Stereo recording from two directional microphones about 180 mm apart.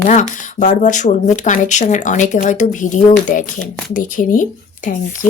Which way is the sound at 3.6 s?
5° left (ahead or behind).